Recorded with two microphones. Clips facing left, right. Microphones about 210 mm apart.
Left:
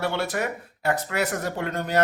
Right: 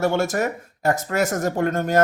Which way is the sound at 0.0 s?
45° right (ahead or behind).